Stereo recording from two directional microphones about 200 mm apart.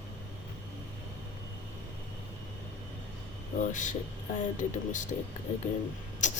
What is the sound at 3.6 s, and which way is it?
Speech, 40° left (ahead or behind).